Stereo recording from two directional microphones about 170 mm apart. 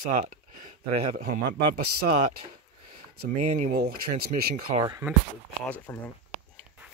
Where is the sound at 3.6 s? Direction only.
60° right (ahead or behind).